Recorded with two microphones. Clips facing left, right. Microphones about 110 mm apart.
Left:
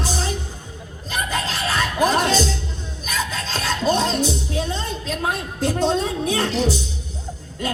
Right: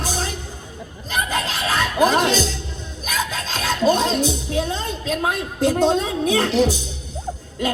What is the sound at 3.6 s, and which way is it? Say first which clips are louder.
Filing: right 2 dB; 45° right (ahead or behind).